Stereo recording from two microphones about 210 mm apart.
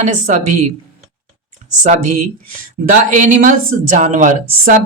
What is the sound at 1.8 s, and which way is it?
Speech, 35° right (ahead or behind).